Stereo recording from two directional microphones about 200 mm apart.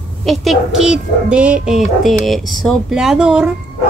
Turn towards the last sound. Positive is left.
turn(degrees=-5)  # may be behind; listen again after turning